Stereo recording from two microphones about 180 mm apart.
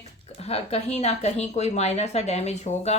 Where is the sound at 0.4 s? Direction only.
35° left (ahead or behind).